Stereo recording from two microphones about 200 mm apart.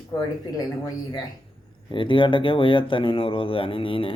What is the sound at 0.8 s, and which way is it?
Speech, 20° left (ahead or behind).